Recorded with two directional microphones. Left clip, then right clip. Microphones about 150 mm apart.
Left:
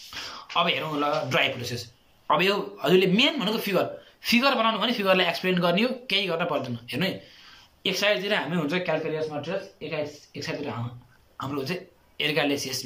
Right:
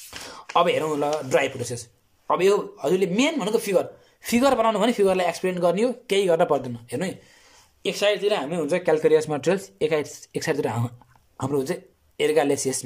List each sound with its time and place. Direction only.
0.5 s speech: 50° right (ahead or behind)
2.2 s speech: 35° right (ahead or behind)
7.8 s speech: 30° right (ahead or behind)
8.6 s speech: 45° right (ahead or behind)
9.8 s speech: 70° right (ahead or behind)
11.3 s speech: 55° right (ahead or behind)